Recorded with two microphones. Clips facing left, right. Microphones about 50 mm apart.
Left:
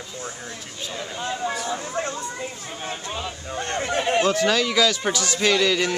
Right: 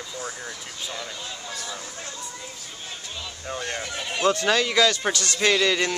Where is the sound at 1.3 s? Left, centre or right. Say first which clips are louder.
Left 9 dB; left.